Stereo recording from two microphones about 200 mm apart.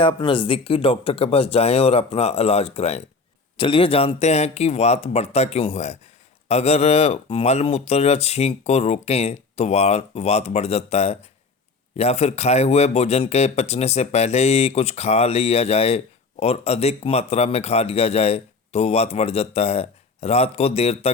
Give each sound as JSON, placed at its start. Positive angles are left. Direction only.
{"t": 0.0, "sound": "a man's voice", "side_deg": 25}